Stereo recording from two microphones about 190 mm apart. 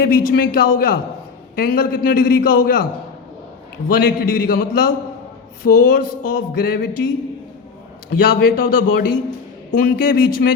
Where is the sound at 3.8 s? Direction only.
50° left (ahead or behind).